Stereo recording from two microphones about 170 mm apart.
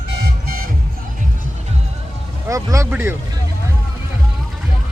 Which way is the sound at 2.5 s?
20° right (ahead or behind).